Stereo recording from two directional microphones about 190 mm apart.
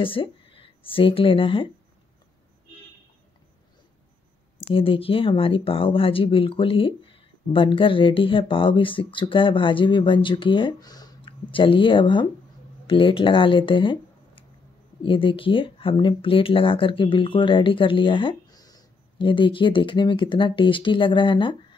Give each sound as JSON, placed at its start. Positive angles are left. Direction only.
{"t": 0.0, "sound": "speech", "side_deg": 30}
{"t": 4.6, "sound": "speech", "side_deg": 30}